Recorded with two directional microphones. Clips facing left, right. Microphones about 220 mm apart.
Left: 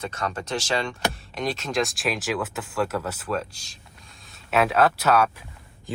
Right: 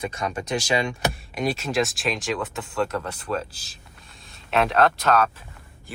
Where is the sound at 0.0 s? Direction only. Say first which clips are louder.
Right 2 dB; 10° right (ahead or behind).